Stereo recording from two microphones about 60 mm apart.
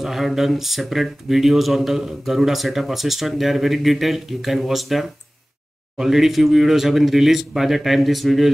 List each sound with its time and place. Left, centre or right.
0.0 s speech: centre